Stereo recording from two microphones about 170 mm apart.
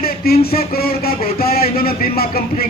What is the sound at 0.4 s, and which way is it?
A man's voice, 60° left (ahead or behind).